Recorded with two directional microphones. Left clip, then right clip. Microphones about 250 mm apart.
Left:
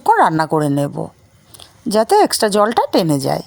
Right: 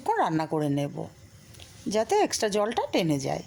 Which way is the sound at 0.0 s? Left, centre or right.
Left.